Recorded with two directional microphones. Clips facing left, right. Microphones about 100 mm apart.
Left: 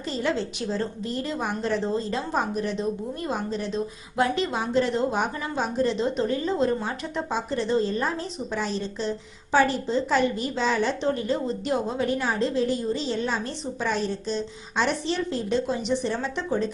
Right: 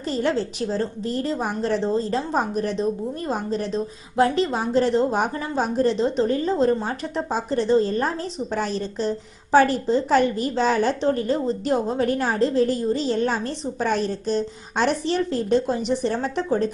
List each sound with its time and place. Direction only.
0.1 s a woman's voice: 45° right (ahead or behind)